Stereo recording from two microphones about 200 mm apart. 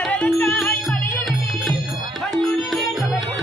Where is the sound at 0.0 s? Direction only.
5° left (ahead or behind).